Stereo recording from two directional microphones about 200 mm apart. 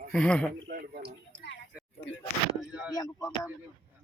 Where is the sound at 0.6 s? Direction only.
50° right (ahead or behind).